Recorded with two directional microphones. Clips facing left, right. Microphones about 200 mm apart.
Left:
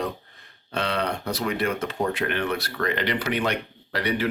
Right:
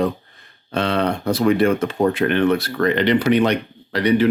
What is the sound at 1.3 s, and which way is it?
Speech, 50° right (ahead or behind).